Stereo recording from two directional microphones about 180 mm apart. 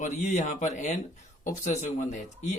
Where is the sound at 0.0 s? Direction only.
40° left (ahead or behind).